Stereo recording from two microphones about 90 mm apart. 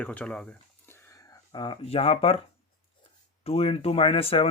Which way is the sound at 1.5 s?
65° left (ahead or behind).